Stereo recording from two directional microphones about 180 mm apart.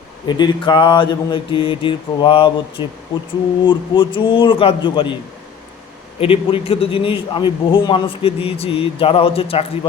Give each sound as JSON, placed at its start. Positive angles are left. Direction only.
{"t": 0.3, "sound": "mantra", "side_deg": 25}
{"t": 6.1, "sound": "a man's voice", "side_deg": 30}